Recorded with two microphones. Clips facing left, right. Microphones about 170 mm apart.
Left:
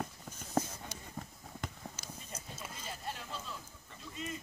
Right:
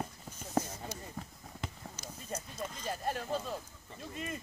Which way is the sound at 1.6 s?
Centre (ahead or behind).